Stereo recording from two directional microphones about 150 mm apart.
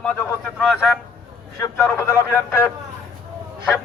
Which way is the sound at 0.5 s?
5° left (ahead or behind).